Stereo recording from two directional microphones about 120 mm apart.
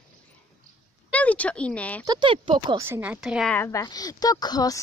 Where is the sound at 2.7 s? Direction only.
20° right (ahead or behind).